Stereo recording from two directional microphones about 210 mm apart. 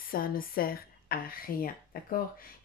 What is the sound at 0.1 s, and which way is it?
Speech, 45° left (ahead or behind).